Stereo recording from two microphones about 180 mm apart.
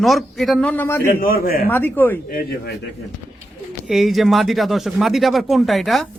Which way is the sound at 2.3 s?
50° left (ahead or behind).